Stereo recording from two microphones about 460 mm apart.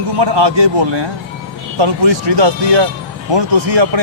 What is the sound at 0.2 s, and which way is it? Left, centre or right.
Speech, right.